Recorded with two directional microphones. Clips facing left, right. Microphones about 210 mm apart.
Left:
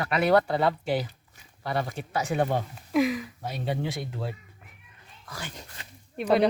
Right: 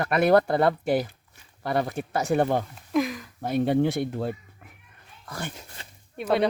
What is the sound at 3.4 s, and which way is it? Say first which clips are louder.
Speech: right 10 dB; 55° right (ahead or behind).